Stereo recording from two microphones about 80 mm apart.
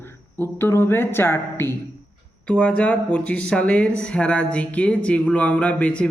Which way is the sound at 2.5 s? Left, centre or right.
Centre.